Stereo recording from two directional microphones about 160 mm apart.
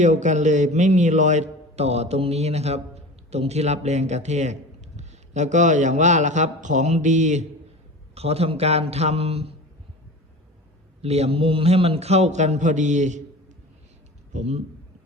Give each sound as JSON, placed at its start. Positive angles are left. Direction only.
{"t": 0.0, "sound": "a man's voice", "side_deg": -50}
{"t": 11.0, "sound": "a man's voice", "side_deg": -40}
{"t": 14.3, "sound": "a man's voice", "side_deg": -40}